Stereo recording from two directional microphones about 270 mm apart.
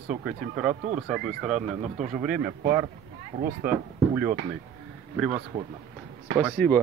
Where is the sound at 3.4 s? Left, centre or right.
Right.